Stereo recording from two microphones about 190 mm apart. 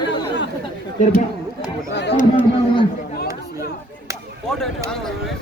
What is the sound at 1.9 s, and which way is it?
Speech, 65° left (ahead or behind).